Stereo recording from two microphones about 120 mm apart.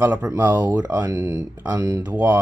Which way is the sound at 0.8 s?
25° right (ahead or behind).